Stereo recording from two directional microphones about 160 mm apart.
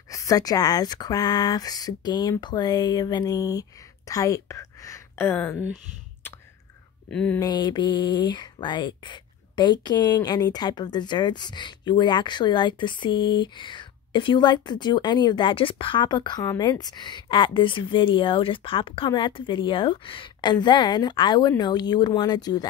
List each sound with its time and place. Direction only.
0.1 s a woman's voice: 20° left (ahead or behind)
7.1 s speech: 5° left (ahead or behind)
7.3 s speech: 25° left (ahead or behind)